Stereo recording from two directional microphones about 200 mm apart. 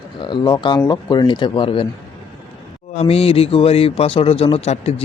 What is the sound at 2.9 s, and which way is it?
A man's voice, 30° left (ahead or behind).